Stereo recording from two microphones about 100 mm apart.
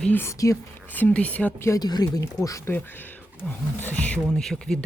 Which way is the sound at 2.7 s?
20° left (ahead or behind).